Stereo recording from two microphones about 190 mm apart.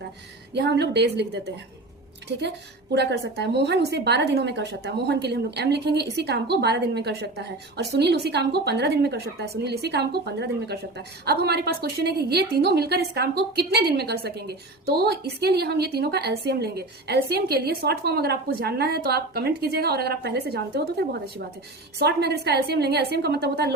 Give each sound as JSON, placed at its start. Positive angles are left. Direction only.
{"t": 0.5, "sound": "a woman's voice", "side_deg": -65}
{"t": 2.9, "sound": "a woman's voice", "side_deg": -65}